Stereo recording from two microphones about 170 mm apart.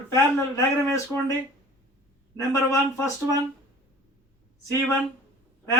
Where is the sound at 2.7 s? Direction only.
15° left (ahead or behind).